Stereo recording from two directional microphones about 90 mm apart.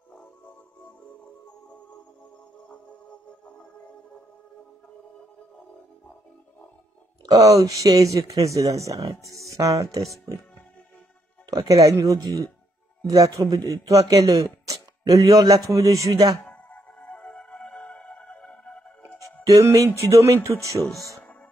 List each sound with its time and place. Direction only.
7.2 s speech: 40° right (ahead or behind)
11.5 s speech: 40° right (ahead or behind)
16.7 s music: 15° left (ahead or behind)
19.4 s speech: 35° right (ahead or behind)